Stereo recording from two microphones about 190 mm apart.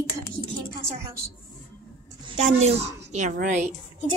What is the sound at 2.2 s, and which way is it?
A woman's voice, 35° right (ahead or behind).